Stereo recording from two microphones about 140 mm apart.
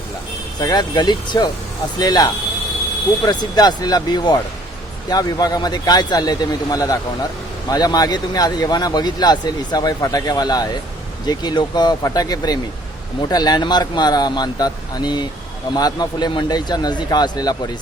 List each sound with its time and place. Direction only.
0.6 s speech: 30° left (ahead or behind)